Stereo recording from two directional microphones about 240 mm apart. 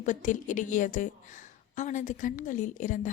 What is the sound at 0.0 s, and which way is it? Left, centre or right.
A woman's voice, left.